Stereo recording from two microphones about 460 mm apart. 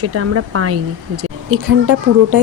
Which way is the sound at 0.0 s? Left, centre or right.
Right.